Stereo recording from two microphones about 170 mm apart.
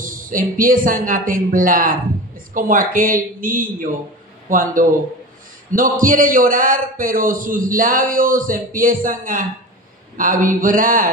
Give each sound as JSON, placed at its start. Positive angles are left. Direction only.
{"t": 0.0, "sound": "a man's voice", "side_deg": -55}